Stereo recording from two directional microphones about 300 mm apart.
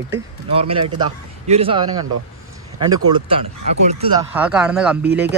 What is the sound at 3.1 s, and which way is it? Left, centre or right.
Speech, centre.